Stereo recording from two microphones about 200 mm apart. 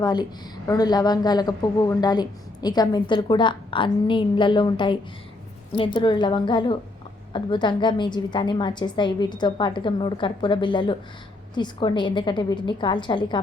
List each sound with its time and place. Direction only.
0.0 s speech: 20° left (ahead or behind)